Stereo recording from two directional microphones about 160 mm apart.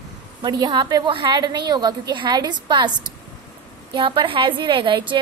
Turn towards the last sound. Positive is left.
turn(degrees=-30)  # may be behind; listen again after turning